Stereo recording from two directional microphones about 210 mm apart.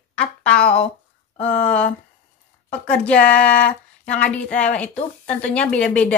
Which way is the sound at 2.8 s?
5° left (ahead or behind).